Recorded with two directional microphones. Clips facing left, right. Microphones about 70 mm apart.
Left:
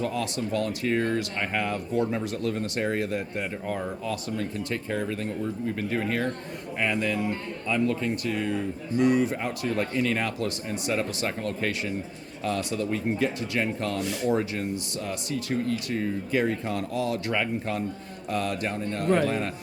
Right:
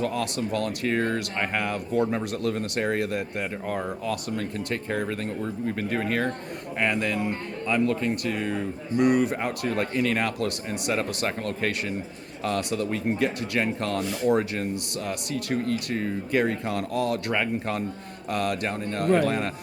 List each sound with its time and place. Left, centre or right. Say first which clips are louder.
0.0 s speech: right 2 dB; right